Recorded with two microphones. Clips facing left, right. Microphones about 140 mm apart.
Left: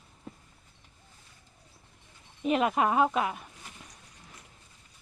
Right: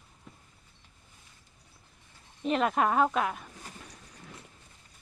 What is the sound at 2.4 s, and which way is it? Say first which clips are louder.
Speech: left 1 dB; 5° left (ahead or behind).